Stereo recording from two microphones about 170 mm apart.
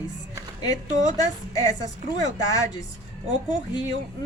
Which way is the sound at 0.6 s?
20° left (ahead or behind).